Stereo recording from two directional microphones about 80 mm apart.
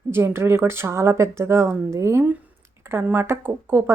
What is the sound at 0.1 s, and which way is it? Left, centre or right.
Speech, right.